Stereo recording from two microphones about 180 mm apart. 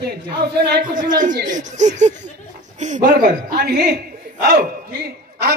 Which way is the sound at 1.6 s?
40° right (ahead or behind).